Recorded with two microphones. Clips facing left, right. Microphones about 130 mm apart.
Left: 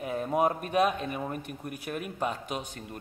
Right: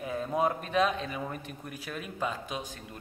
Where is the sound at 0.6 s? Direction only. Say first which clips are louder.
Left 2 dB; 50° left (ahead or behind).